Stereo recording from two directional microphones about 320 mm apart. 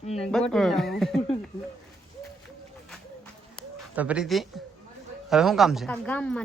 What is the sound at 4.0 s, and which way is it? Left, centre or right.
A man's voice, centre.